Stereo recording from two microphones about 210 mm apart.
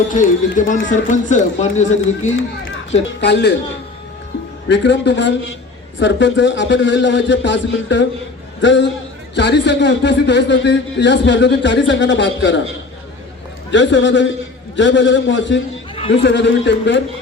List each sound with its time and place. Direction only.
0.1 s speech: 40° left (ahead or behind)
3.1 s speech: 55° left (ahead or behind)
4.7 s a man's voice: 55° left (ahead or behind)
13.7 s a man's voice: 60° left (ahead or behind)